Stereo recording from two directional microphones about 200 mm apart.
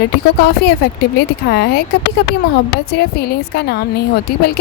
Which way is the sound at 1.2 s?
55° left (ahead or behind).